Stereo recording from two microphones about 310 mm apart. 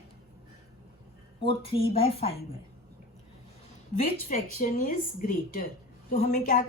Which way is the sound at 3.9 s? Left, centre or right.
Left.